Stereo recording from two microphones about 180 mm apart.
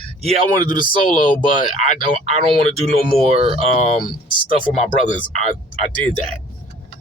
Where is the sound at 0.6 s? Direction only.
25° right (ahead or behind).